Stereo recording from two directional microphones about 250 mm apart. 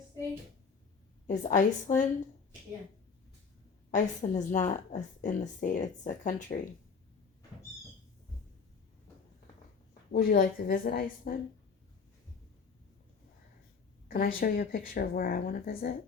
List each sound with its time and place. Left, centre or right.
1.3 s a woman's voice: left
3.9 s a woman's voice: left
10.1 s a woman's voice: left
14.3 s a woman's voice: left